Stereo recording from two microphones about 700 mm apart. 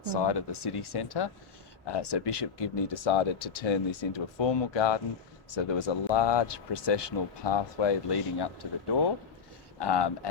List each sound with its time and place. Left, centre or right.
0.0 s speech: left